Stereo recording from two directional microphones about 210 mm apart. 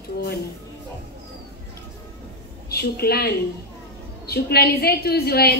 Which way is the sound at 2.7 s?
50° left (ahead or behind).